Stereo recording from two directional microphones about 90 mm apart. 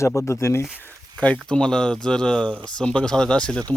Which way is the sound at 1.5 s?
10° left (ahead or behind).